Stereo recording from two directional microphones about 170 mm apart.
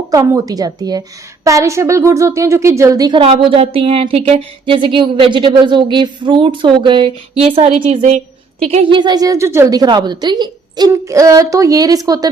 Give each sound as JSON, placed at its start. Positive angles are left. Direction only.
{"t": 0.1, "sound": "a woman's voice", "side_deg": -20}
{"t": 3.2, "sound": "a woman's voice", "side_deg": -35}